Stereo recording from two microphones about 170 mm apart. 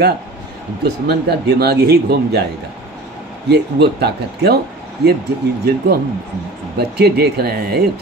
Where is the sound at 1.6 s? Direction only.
70° right (ahead or behind).